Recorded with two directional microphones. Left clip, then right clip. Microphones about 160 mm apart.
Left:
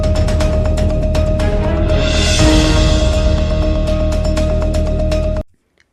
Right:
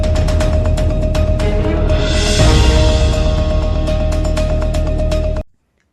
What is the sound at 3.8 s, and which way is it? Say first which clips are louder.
Music: left 1 dB; centre (ahead or behind).